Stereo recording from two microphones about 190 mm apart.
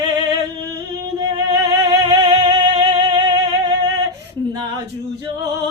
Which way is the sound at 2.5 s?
30° right (ahead or behind).